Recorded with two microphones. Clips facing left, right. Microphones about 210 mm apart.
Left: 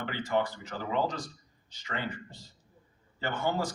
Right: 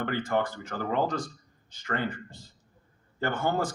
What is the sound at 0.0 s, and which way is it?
Speech, 50° right (ahead or behind).